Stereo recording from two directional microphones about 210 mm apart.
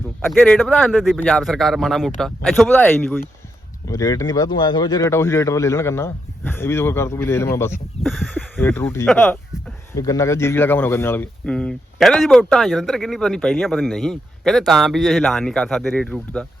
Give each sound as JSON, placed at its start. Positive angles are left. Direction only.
{"t": 0.3, "sound": "speech", "side_deg": 5}
{"t": 8.0, "sound": "speech", "side_deg": 0}
{"t": 8.5, "sound": "speech", "side_deg": 10}